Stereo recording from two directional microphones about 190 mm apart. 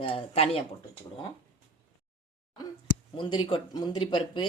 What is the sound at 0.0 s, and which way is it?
Speech, 30° left (ahead or behind).